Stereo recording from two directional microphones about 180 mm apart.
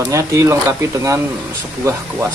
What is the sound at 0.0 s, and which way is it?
Speech, 15° right (ahead or behind).